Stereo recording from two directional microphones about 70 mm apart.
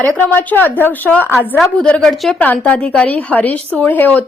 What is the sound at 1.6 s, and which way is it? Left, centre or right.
Speech, centre.